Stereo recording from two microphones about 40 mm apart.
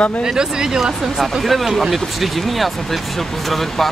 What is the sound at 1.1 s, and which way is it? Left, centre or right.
Speech, centre.